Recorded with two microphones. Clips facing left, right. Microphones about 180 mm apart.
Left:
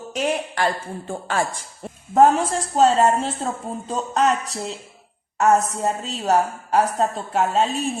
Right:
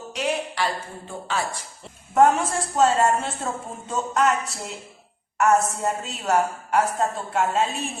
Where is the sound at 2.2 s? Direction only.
30° left (ahead or behind).